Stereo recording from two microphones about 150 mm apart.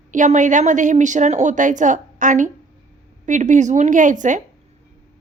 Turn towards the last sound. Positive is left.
turn(degrees=-55)  # may be behind; listen again after turning